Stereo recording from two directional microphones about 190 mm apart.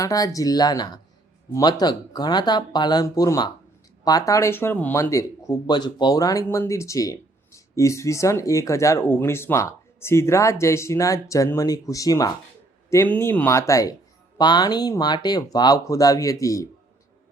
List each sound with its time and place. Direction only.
0.0 s speech: 20° left (ahead or behind)